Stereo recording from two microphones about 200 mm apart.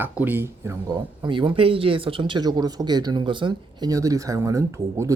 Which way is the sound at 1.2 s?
25° right (ahead or behind).